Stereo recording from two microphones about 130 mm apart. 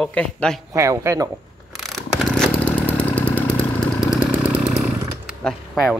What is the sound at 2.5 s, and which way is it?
Chainsaw, 10° left (ahead or behind).